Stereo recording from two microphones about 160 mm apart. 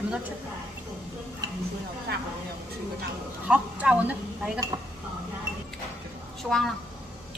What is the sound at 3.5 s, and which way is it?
Speech, 10° right (ahead or behind).